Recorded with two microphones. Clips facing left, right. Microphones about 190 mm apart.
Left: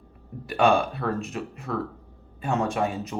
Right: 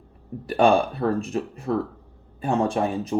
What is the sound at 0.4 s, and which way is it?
Speech, 35° right (ahead or behind).